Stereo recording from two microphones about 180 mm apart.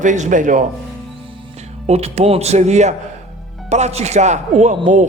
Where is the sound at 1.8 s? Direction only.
35° right (ahead or behind).